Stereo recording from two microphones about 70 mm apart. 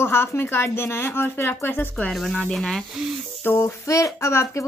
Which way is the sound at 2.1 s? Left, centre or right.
Centre.